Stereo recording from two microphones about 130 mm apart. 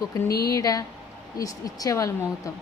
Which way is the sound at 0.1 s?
25° left (ahead or behind).